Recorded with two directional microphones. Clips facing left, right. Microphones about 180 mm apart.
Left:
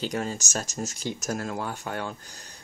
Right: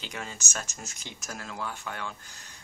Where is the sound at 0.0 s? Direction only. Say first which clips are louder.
Left 10 dB; 40° left (ahead or behind).